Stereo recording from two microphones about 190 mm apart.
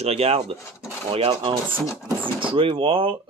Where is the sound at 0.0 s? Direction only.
30° right (ahead or behind).